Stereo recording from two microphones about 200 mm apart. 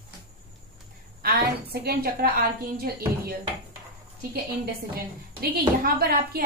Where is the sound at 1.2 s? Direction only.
50° right (ahead or behind).